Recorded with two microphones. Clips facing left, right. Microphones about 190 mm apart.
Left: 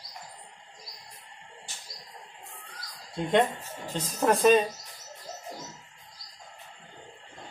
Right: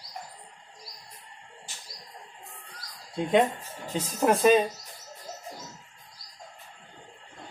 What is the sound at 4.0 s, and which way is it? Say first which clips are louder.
Speech: right 1 dB; 5° right (ahead or behind).